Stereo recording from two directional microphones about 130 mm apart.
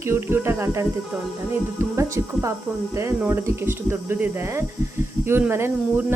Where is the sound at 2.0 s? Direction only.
20° right (ahead or behind).